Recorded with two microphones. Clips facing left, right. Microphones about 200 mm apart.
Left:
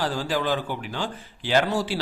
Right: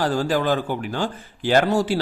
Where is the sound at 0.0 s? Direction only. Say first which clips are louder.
Right 5 dB; 50° right (ahead or behind).